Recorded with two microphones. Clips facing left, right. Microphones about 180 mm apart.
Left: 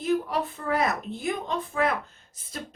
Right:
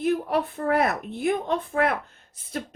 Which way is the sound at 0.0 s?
60° right (ahead or behind).